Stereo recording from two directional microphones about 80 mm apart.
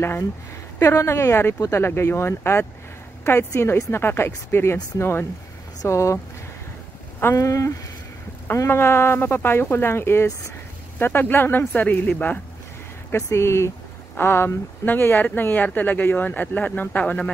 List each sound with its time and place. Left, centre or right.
0.7 s speech: left
7.3 s speech: left
8.5 s speech: left
13.1 s speech: left; by 17.3 s centre